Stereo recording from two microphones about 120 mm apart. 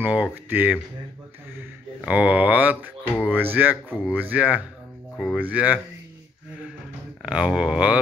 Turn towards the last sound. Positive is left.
turn(degrees=-10)  # may be behind; listen again after turning